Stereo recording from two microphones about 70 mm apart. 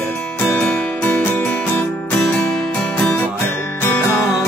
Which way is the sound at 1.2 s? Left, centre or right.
Left.